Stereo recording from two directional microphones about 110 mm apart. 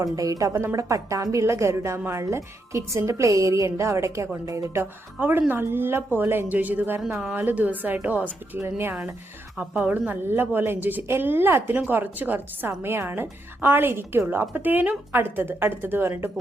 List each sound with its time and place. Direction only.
0.0 s a woman's voice: 30° right (ahead or behind)
7.0 s a woman's voice: 5° right (ahead or behind)